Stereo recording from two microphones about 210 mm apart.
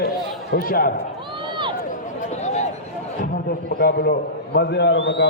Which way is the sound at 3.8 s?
45° left (ahead or behind).